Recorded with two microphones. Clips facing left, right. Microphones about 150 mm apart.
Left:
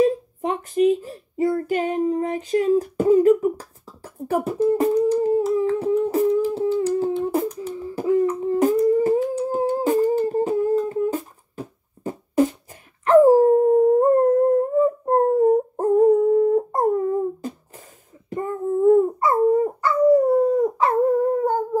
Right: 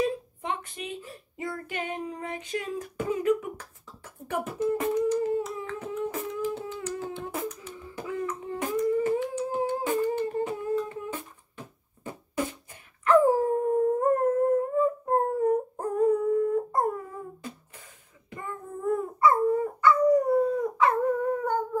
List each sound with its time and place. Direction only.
0.0 s a child's voice: 40° left (ahead or behind)
4.3 s humming: 35° left (ahead or behind)
13.0 s dog: 40° left (ahead or behind)
16.1 s dog: 45° left (ahead or behind)